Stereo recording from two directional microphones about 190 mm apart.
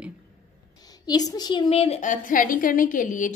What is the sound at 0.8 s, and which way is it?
A woman's voice, 20° left (ahead or behind).